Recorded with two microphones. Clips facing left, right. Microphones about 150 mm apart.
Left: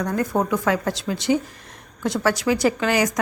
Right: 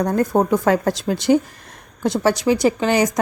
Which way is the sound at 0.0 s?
35° right (ahead or behind).